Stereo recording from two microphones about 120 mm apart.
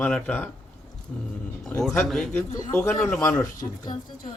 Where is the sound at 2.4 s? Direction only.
30° left (ahead or behind).